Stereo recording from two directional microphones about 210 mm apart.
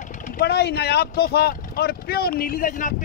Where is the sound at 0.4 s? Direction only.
50° left (ahead or behind).